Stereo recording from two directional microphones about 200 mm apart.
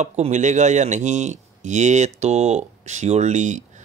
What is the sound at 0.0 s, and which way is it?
Speech, 35° right (ahead or behind).